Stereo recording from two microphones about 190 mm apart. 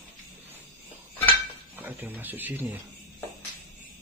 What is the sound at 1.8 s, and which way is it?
Speech, 10° right (ahead or behind).